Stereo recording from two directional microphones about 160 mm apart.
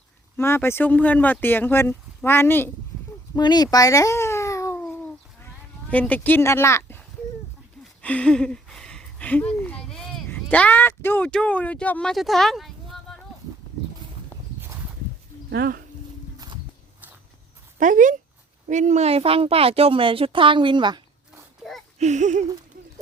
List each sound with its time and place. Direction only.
0.3 s speech: 15° left (ahead or behind)
3.3 s a child's voice: 25° left (ahead or behind)
4.8 s a sound: 5° left (ahead or behind)
5.9 s speech: 10° left (ahead or behind)
8.0 s a sound: 10° left (ahead or behind)
10.2 s speech: 10° left (ahead or behind)
15.4 s speech: 85° right
17.7 s a woman's voice: 55° right (ahead or behind); by 21.4 s 30° right (ahead or behind)
21.9 s speech: 45° right (ahead or behind)